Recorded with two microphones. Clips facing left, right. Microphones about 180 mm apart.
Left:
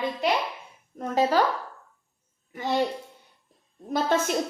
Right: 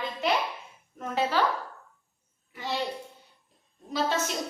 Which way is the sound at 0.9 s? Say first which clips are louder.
Left 5 dB; 40° left (ahead or behind).